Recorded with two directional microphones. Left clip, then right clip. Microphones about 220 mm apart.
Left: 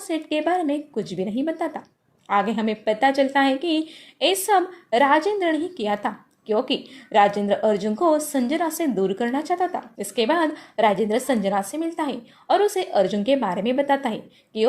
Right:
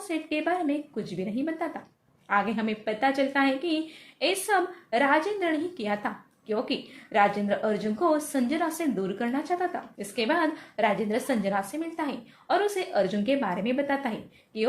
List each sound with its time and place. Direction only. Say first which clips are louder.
0.1 s a woman's voice: left 6 dB; 30° left (ahead or behind)